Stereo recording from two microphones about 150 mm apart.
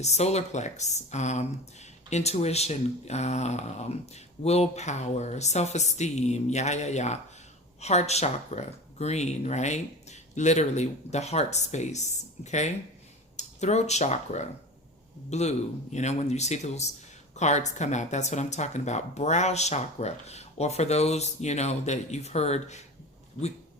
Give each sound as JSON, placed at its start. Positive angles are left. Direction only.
{"t": 0.0, "sound": "speech", "side_deg": 45}